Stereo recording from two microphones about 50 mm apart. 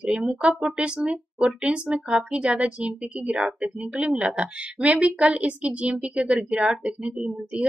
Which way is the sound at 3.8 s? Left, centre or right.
Right.